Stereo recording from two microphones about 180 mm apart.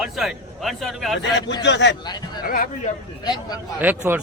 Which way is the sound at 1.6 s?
75° left (ahead or behind).